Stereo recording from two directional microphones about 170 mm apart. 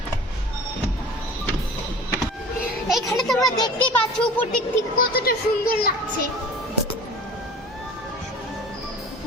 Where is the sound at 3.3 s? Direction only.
25° left (ahead or behind).